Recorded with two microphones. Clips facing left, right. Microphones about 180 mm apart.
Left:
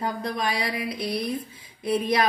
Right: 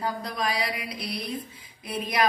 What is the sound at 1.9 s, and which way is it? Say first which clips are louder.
Speech: left 4 dB; 25° left (ahead or behind).